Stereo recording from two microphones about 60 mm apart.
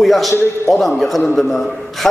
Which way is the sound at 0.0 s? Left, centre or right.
Centre.